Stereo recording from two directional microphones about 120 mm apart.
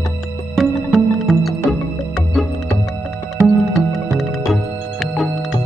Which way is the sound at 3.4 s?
Centre (ahead or behind).